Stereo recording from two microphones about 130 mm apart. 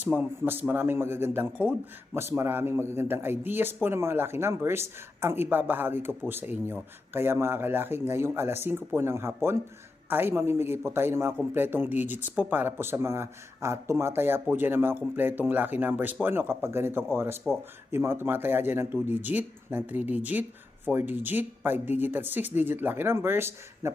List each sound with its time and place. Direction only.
0.0 s a man's voice: 10° right (ahead or behind)